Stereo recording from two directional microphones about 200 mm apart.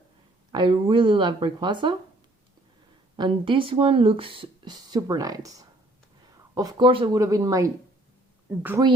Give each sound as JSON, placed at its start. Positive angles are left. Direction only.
{"t": 0.5, "sound": "speech", "side_deg": -25}
{"t": 3.2, "sound": "speech", "side_deg": -25}